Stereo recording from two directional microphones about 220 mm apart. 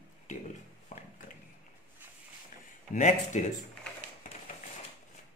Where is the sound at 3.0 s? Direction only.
35° left (ahead or behind).